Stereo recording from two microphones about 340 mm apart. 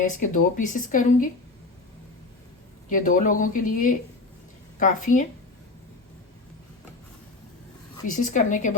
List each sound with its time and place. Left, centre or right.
0.1 s speech: left
2.9 s speech: left
8.1 s speech: left